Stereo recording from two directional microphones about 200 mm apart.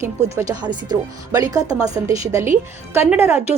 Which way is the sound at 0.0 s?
15° right (ahead or behind).